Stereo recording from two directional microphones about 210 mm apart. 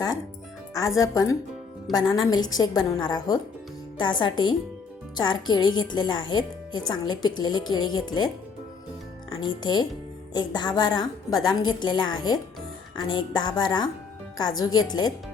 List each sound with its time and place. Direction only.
0.7 s a woman's voice: 15° left (ahead or behind)
9.3 s a woman's voice: 20° left (ahead or behind)